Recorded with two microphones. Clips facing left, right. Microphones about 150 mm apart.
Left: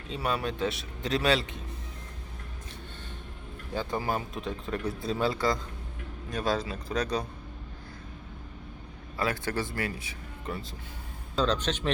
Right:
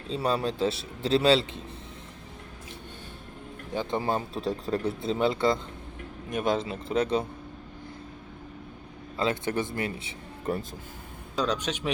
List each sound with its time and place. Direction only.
0.1 s speech: 30° right (ahead or behind)
3.7 s speech: 20° right (ahead or behind)
9.1 s speech: 20° right (ahead or behind)
10.4 s speech: 40° right (ahead or behind)
11.3 s speech: 10° right (ahead or behind)